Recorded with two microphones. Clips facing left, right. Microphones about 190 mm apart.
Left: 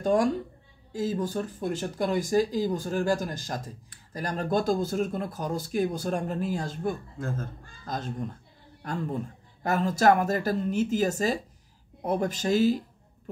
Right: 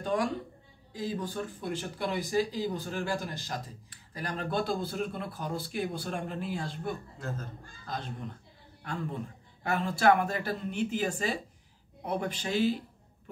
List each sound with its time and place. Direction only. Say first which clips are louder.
0.0 s a woman's voice: left 6 dB; 45° left (ahead or behind)